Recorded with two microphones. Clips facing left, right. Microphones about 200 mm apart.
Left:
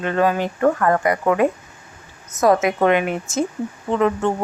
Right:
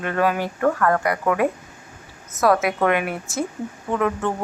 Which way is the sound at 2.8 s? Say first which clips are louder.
Left 3 dB; 20° left (ahead or behind).